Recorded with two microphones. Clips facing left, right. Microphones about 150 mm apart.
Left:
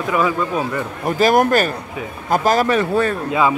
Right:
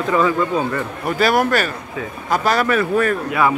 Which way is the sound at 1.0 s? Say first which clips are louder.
Left 3 dB; 40° left (ahead or behind).